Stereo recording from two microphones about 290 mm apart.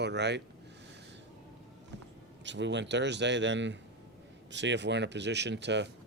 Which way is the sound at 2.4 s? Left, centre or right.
Right.